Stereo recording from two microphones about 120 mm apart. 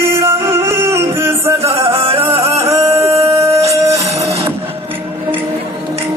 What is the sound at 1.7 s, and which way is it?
Music, 55° right (ahead or behind).